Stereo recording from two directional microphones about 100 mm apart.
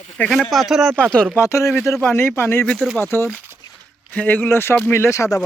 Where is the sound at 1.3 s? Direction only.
30° left (ahead or behind).